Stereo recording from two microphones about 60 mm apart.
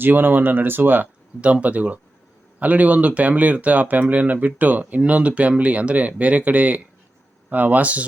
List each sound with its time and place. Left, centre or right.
0.0 s speech: right
1.4 s speech: right